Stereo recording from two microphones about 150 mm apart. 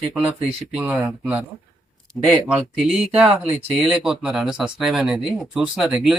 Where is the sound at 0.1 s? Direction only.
5° right (ahead or behind).